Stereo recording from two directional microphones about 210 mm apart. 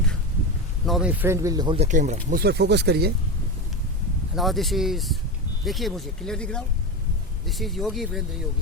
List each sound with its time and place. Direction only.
0.9 s speech: 5° right (ahead or behind); by 2.1 s 35° right (ahead or behind)
2.3 s speech: 50° right (ahead or behind)
4.4 s speech: centre (ahead or behind)